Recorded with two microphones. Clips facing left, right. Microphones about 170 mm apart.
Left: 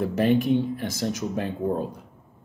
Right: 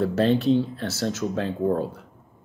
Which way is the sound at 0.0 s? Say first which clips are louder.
Right 1 dB; 15° left (ahead or behind).